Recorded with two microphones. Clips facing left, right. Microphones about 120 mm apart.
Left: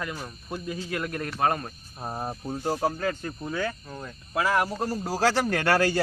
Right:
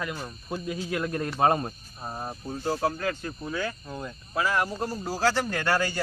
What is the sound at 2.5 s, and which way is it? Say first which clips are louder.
Speech: even; 15° left (ahead or behind).